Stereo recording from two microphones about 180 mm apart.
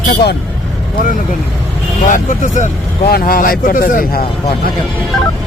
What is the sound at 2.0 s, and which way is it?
A man's voice, 45° left (ahead or behind).